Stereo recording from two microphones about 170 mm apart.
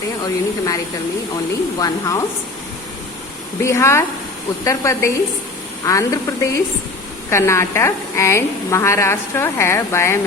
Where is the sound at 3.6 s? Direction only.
15° left (ahead or behind).